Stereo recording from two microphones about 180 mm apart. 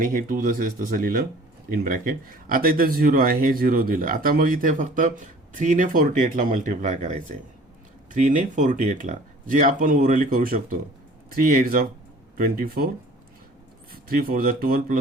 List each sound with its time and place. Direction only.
0.0 s speech: 50° right (ahead or behind)
13.9 s speech: 55° right (ahead or behind)